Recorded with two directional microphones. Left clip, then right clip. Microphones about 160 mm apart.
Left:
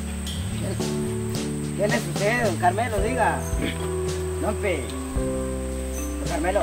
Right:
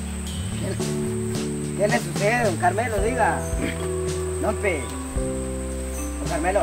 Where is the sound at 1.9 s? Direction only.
5° right (ahead or behind).